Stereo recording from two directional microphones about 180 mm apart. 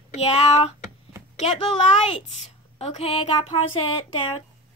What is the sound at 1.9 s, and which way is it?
A woman's voice, 35° left (ahead or behind).